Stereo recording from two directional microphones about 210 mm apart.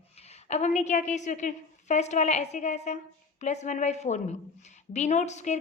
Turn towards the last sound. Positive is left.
turn(degrees=35)  # may be behind; listen again after turning